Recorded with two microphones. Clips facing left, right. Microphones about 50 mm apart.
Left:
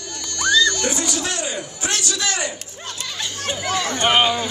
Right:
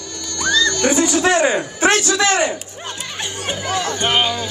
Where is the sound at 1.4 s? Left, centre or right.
Right.